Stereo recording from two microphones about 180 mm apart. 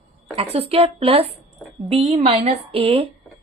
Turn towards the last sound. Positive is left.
turn(degrees=-30)  # may be behind; listen again after turning